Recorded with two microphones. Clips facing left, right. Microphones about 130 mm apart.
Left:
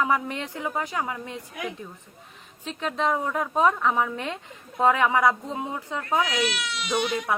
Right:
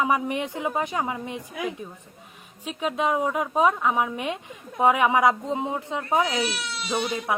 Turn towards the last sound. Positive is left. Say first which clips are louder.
# even
turn(degrees=-15)  # may be behind; listen again after turning